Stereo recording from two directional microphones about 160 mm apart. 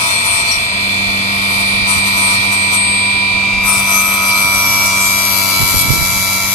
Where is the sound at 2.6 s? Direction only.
25° left (ahead or behind).